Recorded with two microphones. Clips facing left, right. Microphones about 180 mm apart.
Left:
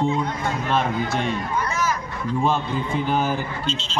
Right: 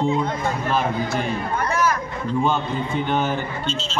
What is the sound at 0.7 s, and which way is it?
Speech, centre (ahead or behind).